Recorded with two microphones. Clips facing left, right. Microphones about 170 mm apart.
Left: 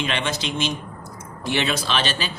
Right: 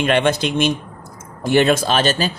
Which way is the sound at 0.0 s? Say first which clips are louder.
Right 9 dB; 55° right (ahead or behind).